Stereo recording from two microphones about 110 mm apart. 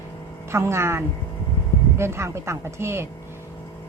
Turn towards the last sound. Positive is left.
turn(degrees=-25)  # may be behind; listen again after turning